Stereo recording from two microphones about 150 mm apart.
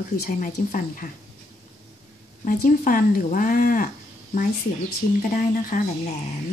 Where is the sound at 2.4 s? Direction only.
65° left (ahead or behind).